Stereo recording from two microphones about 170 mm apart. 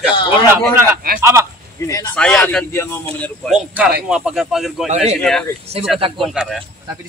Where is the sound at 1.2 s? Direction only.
15° right (ahead or behind).